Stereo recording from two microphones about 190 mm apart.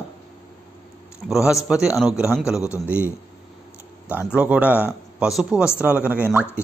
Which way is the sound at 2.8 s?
10° right (ahead or behind).